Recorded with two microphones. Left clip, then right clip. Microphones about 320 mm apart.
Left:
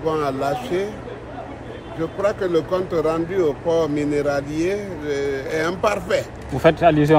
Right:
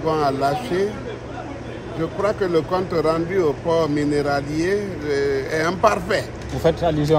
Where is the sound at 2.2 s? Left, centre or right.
Centre.